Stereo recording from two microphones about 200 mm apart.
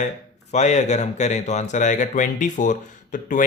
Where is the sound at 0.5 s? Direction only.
35° left (ahead or behind).